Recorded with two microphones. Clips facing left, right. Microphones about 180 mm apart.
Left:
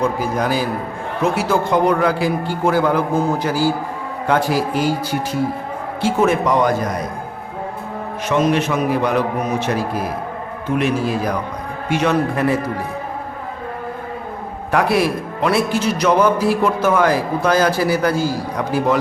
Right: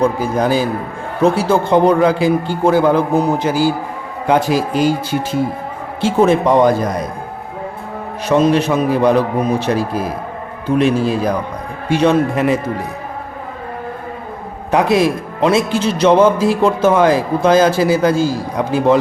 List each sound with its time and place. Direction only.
0.2 s a man's voice: 25° right (ahead or behind)
8.3 s a man's voice: 35° right (ahead or behind)
14.7 s a man's voice: 20° right (ahead or behind)